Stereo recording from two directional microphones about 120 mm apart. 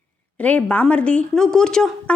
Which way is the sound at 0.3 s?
10° left (ahead or behind).